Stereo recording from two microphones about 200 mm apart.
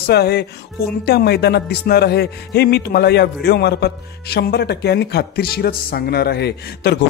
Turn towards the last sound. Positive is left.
turn(degrees=55)  # may be behind; listen again after turning